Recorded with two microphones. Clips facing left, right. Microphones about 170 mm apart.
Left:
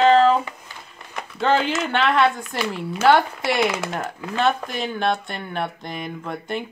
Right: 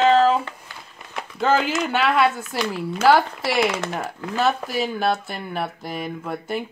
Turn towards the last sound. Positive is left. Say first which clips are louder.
# right 1 dB
turn(degrees=-5)  # may be behind; listen again after turning